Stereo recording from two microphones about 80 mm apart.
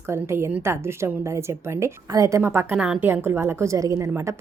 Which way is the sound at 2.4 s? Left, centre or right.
Right.